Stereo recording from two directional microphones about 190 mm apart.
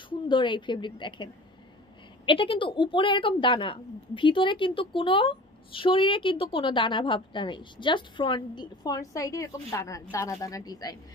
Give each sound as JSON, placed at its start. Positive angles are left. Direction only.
{"t": 0.1, "sound": "a woman's voice", "side_deg": 25}